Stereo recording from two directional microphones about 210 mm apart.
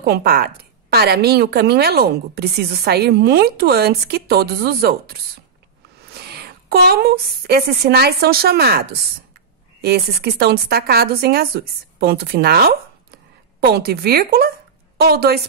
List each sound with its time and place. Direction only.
0.0 s a woman's voice: 45° right (ahead or behind)
6.1 s a woman's voice: 50° right (ahead or behind)